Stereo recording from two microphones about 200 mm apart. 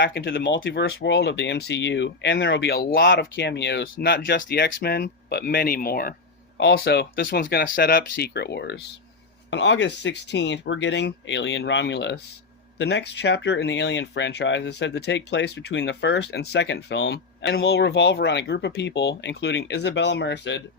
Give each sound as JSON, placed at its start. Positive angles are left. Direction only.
{"t": 0.0, "sound": "speech", "side_deg": 55}